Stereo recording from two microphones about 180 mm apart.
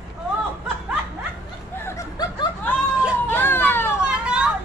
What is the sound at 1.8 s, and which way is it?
Snicker, 15° left (ahead or behind).